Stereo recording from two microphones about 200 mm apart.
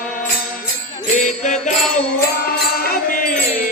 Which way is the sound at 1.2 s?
35° left (ahead or behind).